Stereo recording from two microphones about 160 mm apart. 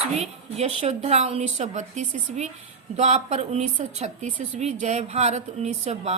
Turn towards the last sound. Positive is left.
turn(degrees=-45)  # may be behind; listen again after turning